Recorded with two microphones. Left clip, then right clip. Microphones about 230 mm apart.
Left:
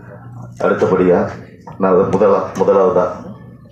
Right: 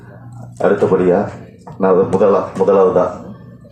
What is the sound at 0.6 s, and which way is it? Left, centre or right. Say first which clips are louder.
Speech: right 1 dB; right.